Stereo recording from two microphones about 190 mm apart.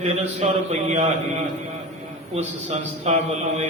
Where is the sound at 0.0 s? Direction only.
35° right (ahead or behind).